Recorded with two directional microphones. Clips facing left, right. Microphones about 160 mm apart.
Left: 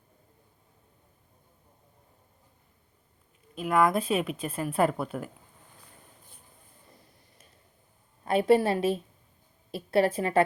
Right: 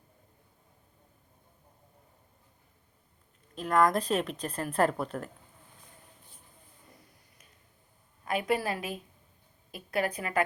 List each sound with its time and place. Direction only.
3.5 s speech: 5° left (ahead or behind)
8.2 s a woman's voice: 30° left (ahead or behind)